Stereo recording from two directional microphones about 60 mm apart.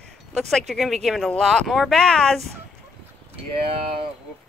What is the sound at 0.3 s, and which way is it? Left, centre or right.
Speech, centre.